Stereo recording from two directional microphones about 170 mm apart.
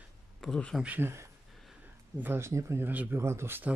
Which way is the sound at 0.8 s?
10° right (ahead or behind).